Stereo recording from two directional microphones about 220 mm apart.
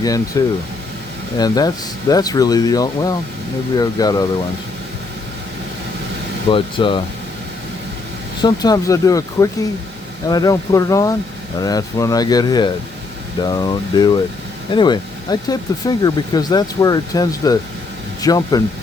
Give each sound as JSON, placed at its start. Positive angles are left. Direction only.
{"t": 0.4, "sound": "speech", "side_deg": 15}
{"t": 6.5, "sound": "speech", "side_deg": 25}
{"t": 8.4, "sound": "speech", "side_deg": 20}